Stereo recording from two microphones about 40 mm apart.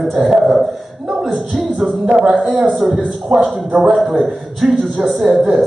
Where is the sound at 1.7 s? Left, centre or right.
Right.